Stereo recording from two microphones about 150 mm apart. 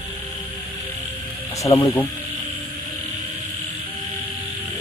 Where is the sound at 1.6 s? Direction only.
25° left (ahead or behind).